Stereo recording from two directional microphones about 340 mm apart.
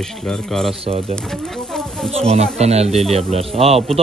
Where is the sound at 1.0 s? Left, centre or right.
Centre.